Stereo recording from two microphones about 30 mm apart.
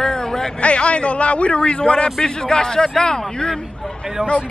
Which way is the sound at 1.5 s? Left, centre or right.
Left.